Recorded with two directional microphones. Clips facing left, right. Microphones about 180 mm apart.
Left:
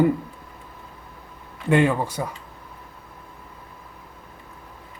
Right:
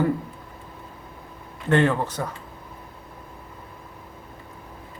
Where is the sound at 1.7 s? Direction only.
10° left (ahead or behind).